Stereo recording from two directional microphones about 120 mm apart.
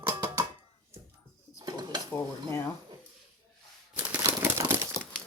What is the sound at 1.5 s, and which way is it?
Dishes, 35° right (ahead or behind).